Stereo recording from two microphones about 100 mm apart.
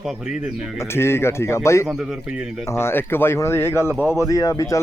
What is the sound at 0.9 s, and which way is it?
Speech, 25° left (ahead or behind).